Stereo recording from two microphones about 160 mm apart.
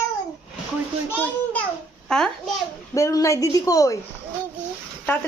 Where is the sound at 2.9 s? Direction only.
20° left (ahead or behind).